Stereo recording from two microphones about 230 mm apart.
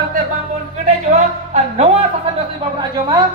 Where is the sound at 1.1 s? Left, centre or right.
Right.